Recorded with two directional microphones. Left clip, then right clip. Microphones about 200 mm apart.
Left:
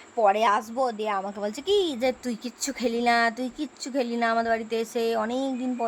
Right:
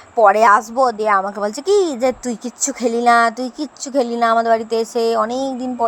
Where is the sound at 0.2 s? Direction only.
20° right (ahead or behind).